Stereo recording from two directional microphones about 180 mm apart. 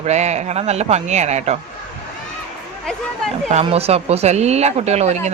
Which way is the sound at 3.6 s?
35° right (ahead or behind).